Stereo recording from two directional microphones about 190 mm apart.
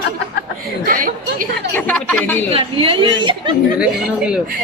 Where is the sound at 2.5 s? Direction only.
30° right (ahead or behind).